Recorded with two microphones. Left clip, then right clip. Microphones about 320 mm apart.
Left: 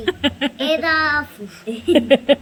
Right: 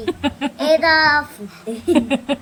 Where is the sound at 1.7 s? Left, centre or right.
Right.